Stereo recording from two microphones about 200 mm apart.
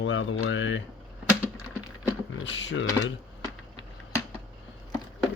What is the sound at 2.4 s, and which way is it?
Speech, 65° left (ahead or behind).